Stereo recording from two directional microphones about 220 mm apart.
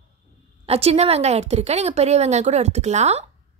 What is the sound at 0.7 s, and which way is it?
A woman's voice, 25° right (ahead or behind).